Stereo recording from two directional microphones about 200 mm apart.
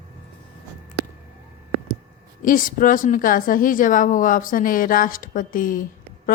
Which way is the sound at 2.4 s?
40° left (ahead or behind).